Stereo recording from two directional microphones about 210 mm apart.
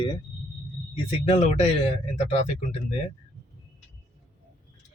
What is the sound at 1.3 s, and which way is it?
Speech, 30° left (ahead or behind).